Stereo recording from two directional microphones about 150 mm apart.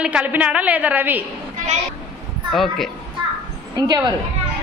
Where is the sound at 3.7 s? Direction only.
25° right (ahead or behind).